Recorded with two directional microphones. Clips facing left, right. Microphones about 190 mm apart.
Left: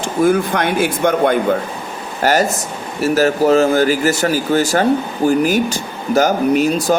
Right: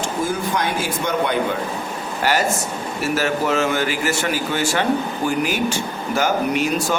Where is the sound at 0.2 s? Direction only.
60° left (ahead or behind).